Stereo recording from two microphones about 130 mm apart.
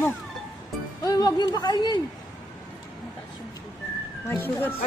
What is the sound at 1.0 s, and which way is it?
Speech, 30° left (ahead or behind).